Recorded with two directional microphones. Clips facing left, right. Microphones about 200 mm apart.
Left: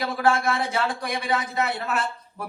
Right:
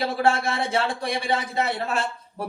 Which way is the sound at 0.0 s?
25° right (ahead or behind).